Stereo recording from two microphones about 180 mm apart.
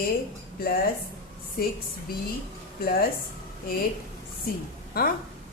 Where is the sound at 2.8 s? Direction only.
55° left (ahead or behind).